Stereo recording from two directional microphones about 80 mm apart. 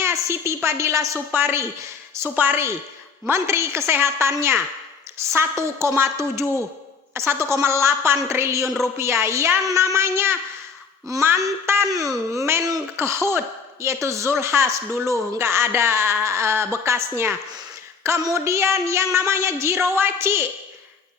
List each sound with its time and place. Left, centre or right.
0.0 s a woman's voice: right
1.3 s a woman's voice: right
8.6 s a woman's voice: centre
9.0 s speech: right